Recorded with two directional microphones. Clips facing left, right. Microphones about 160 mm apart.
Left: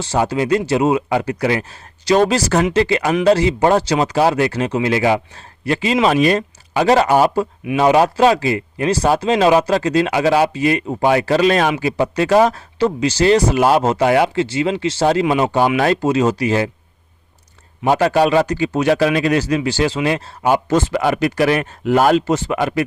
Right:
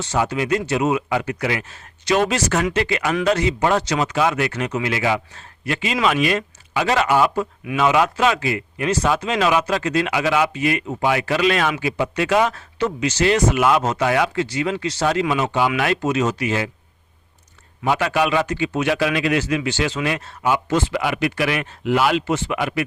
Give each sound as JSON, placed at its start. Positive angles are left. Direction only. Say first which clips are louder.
{"t": 0.0, "sound": "speech", "louder": "left 4 dB", "side_deg": 30}
{"t": 17.8, "sound": "speech", "louder": "left 5 dB", "side_deg": 40}